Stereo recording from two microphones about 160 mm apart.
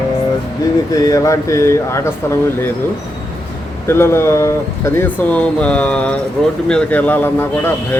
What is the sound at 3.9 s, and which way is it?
A man's voice, 15° left (ahead or behind).